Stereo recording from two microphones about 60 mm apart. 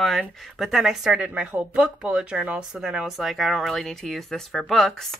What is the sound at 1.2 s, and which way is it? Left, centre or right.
Speech, centre.